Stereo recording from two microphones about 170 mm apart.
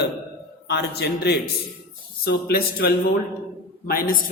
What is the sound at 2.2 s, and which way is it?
Speech, 65° left (ahead or behind).